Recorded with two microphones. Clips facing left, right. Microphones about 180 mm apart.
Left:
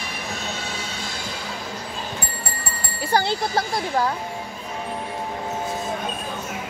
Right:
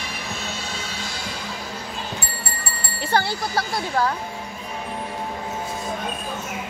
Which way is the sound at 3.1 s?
20° left (ahead or behind).